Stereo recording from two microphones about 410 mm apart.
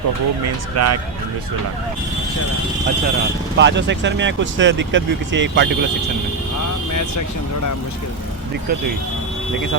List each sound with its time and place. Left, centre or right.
0.8 s speech: right
3.6 s speech: right
6.9 s speech: left